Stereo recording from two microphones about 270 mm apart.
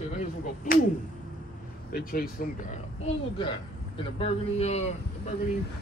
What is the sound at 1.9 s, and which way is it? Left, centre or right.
Speech, left.